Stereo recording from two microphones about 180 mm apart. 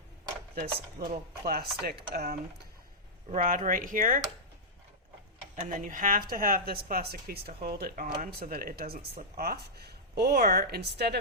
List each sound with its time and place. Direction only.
0.5 s speech: 55° right (ahead or behind)
3.3 s speech: 45° right (ahead or behind)
5.6 s speech: 45° right (ahead or behind); by 11.2 s 65° right (ahead or behind)